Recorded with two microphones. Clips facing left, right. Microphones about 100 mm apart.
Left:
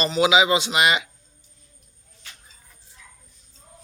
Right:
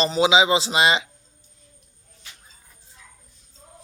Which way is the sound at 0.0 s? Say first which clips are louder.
Right 1 dB; 25° right (ahead or behind).